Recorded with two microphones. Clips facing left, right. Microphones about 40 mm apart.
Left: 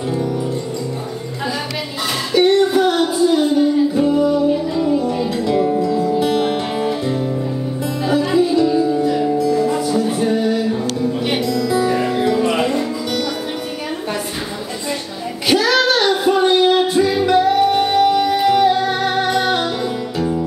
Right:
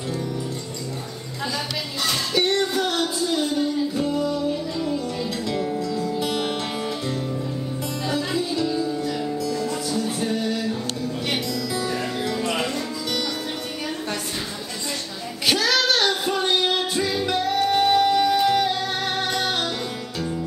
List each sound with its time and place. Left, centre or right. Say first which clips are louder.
2.3 s music: left 10 dB; centre
11.4 s music: left 9 dB; centre
15.4 s child singing: left 6 dB; centre
20.2 s music: left 8 dB; centre